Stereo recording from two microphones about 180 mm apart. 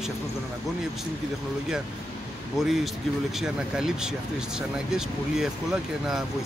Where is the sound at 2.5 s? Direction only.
Centre (ahead or behind).